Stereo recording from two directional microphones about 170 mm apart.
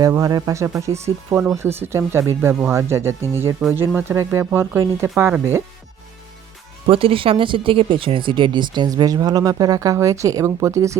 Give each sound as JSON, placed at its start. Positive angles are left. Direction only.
{"t": 0.0, "sound": "speech", "side_deg": -20}
{"t": 6.8, "sound": "speech", "side_deg": -35}